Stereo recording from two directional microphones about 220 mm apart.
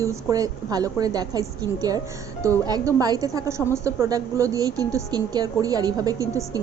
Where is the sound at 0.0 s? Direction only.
15° right (ahead or behind).